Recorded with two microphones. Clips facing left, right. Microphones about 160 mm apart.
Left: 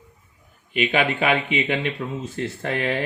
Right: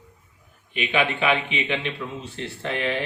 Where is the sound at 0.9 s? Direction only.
45° left (ahead or behind).